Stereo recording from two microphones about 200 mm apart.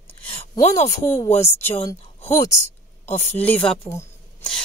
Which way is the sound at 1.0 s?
10° left (ahead or behind).